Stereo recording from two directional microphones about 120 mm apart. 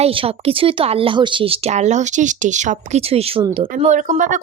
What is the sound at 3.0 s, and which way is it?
Speech, 55° right (ahead or behind).